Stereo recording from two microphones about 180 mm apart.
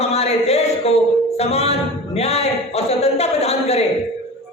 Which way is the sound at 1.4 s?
35° left (ahead or behind).